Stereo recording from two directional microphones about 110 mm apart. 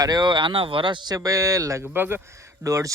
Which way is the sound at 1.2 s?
30° right (ahead or behind).